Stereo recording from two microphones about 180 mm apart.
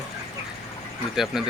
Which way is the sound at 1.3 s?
Centre (ahead or behind).